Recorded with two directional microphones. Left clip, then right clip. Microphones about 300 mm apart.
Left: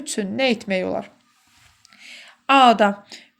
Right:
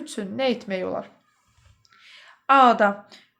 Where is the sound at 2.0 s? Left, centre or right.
Left.